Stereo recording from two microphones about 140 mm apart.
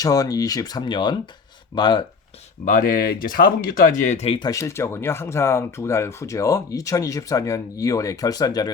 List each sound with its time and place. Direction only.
0.0 s speech: 25° left (ahead or behind)
2.6 s speech: 75° left (ahead or behind); by 4.4 s 50° left (ahead or behind)
4.4 s speech: 25° left (ahead or behind)